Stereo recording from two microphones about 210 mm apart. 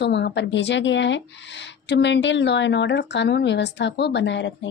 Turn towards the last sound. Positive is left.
turn(degrees=60)  # may be behind; listen again after turning